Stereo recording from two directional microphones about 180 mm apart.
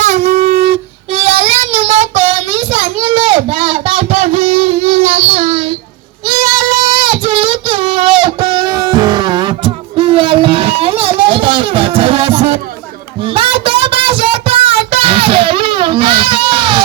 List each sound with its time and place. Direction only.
0.0 s wind instrument: 40° right (ahead or behind)
1.1 s child singing: 35° right (ahead or behind)
6.2 s child singing: 20° right (ahead or behind)
13.2 s a sound: 30° right (ahead or behind)